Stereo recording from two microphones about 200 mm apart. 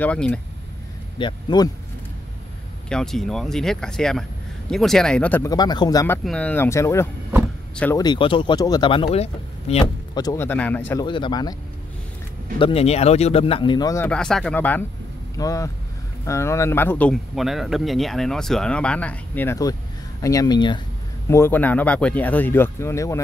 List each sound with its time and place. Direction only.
0.0 s speech: 5° left (ahead or behind)
1.1 s speech: 20° left (ahead or behind)
2.9 s speech: centre (ahead or behind); by 6.1 s 20° left (ahead or behind)
6.2 s speech: 5° left (ahead or behind)
8.0 s speech: 25° left (ahead or behind)
11.1 s speech: 25° left (ahead or behind)
12.5 s speech: 30° left (ahead or behind)
21.3 s speech: 10° left (ahead or behind)